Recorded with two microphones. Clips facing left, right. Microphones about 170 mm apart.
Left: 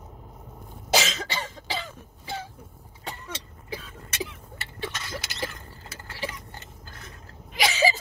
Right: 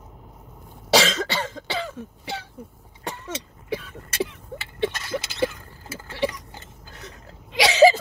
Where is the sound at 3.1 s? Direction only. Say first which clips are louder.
Right 6 dB; 75° right (ahead or behind).